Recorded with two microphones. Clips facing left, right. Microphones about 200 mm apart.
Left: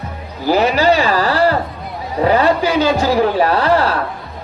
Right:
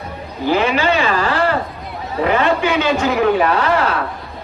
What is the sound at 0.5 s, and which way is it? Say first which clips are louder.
A man's voice: left 3 dB; 35° left (ahead or behind).